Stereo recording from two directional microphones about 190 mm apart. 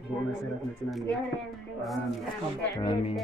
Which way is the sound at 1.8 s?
Centre (ahead or behind).